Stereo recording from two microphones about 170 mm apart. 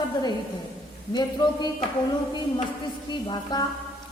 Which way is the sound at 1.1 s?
25° left (ahead or behind).